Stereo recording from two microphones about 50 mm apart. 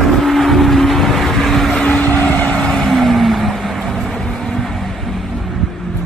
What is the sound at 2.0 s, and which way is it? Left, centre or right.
Vehicle, left.